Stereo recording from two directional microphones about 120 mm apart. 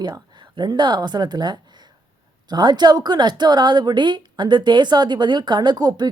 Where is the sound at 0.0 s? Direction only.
40° right (ahead or behind).